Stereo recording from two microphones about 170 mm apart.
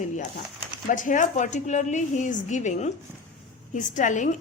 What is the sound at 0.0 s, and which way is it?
Speech, 45° left (ahead or behind).